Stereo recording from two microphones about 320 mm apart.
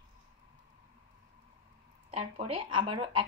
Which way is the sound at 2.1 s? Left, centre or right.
Right.